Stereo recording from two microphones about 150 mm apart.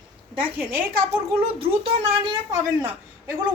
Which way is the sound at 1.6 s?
35° right (ahead or behind).